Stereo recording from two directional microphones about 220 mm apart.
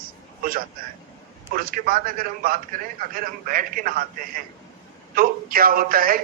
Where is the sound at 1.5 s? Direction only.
40° right (ahead or behind).